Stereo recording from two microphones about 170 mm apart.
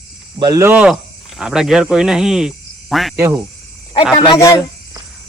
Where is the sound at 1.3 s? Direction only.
5° right (ahead or behind).